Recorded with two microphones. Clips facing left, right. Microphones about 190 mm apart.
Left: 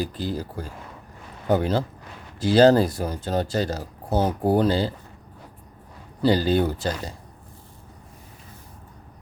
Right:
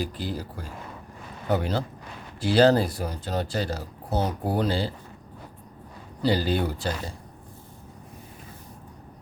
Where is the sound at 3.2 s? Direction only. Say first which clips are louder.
Left 4 dB; 45° left (ahead or behind).